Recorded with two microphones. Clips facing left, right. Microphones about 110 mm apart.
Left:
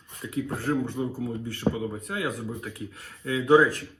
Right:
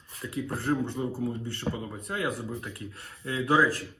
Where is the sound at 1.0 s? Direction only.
15° left (ahead or behind).